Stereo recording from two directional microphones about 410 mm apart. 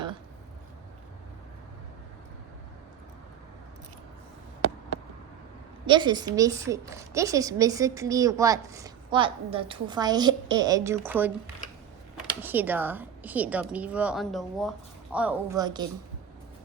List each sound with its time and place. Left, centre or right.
5.8 s a woman's voice: centre
12.4 s a woman's voice: centre